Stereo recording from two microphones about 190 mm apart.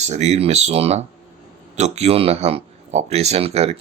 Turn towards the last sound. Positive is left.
turn(degrees=-35)  # may be behind; listen again after turning